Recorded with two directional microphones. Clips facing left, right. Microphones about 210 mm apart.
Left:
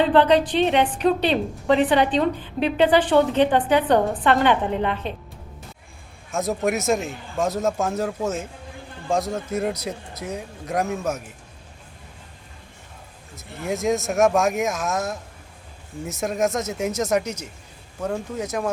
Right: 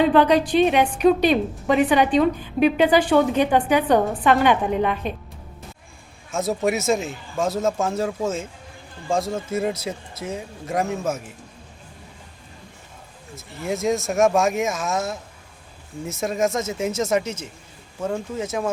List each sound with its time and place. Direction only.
0.0 s a woman's voice: 10° right (ahead or behind)
6.3 s speech: centre (ahead or behind)
13.3 s speech: centre (ahead or behind)